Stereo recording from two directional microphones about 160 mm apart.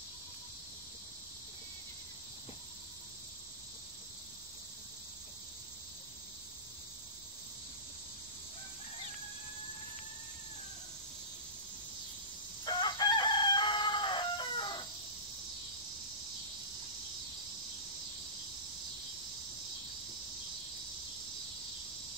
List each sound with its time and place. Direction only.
12.6 s chicken: 30° left (ahead or behind)